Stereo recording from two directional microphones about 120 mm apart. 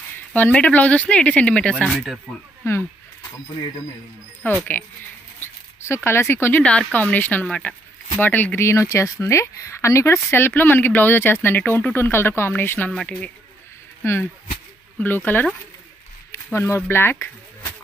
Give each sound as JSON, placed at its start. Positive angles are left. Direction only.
{"t": 0.3, "sound": "speech", "side_deg": 10}
{"t": 1.9, "sound": "speech", "side_deg": 0}
{"t": 2.6, "sound": "speech", "side_deg": 20}
{"t": 4.5, "sound": "speech", "side_deg": 15}
{"t": 12.9, "sound": "speech", "side_deg": 5}
{"t": 15.0, "sound": "speech", "side_deg": 15}
{"t": 16.5, "sound": "speech", "side_deg": 20}
{"t": 16.9, "sound": "music", "side_deg": 20}